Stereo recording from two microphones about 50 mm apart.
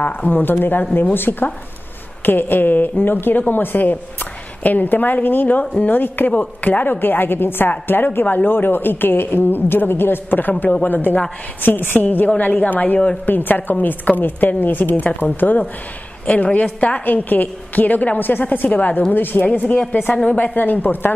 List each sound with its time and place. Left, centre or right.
0.3 s a woman's voice: left
16.4 s speech: left